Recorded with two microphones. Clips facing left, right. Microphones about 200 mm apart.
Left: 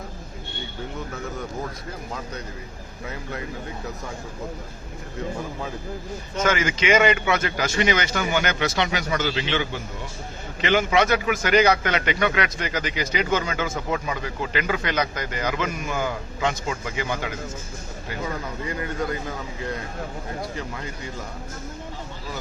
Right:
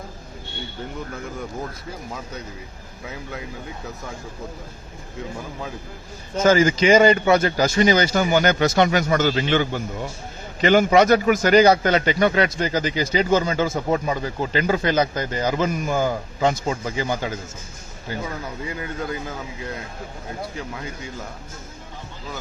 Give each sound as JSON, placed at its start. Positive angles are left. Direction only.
{"t": 6.3, "sound": "a man's voice", "side_deg": -35}